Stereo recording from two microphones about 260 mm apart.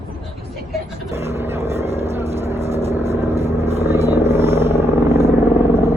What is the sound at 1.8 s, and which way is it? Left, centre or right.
Vehicle, right.